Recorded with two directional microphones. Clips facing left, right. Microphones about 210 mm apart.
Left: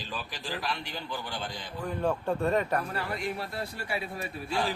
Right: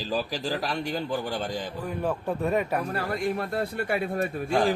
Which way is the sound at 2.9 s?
45° right (ahead or behind).